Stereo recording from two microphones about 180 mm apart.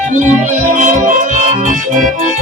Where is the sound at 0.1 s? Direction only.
45° right (ahead or behind).